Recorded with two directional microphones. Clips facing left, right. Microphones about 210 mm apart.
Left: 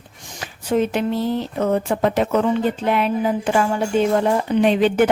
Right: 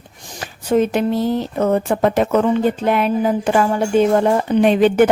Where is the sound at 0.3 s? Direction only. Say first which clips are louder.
Right 3 dB; 45° right (ahead or behind).